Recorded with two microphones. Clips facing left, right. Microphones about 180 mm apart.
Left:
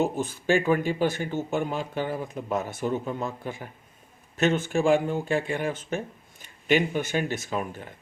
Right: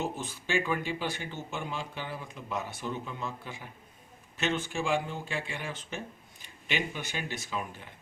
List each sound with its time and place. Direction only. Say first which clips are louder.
0.0 s speech: left 9 dB; 50° left (ahead or behind)